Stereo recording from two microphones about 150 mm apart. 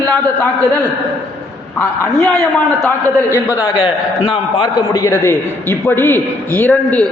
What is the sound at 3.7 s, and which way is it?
Speech, 35° left (ahead or behind).